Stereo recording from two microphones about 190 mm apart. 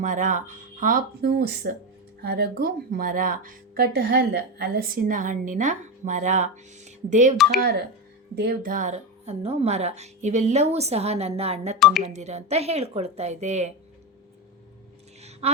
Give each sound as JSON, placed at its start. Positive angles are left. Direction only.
{"t": 0.0, "sound": "a woman's voice", "side_deg": -45}
{"t": 7.6, "sound": "a woman's voice", "side_deg": -55}
{"t": 15.2, "sound": "a sound", "side_deg": -35}